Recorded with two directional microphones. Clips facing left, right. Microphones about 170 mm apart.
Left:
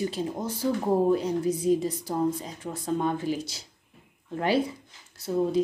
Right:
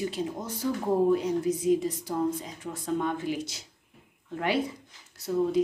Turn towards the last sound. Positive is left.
turn(degrees=30)  # may be behind; listen again after turning